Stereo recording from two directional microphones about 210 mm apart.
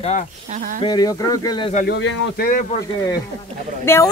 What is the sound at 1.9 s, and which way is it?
Speech, 55° left (ahead or behind).